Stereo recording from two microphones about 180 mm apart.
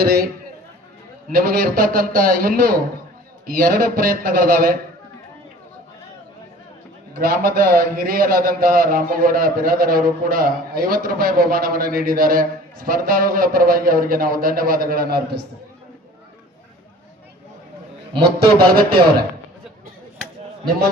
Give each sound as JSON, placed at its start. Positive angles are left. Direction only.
{"t": 0.0, "sound": "speech", "side_deg": -60}
{"t": 1.3, "sound": "a man's voice", "side_deg": -50}
{"t": 7.2, "sound": "a man's voice", "side_deg": -50}
{"t": 18.2, "sound": "speech", "side_deg": -60}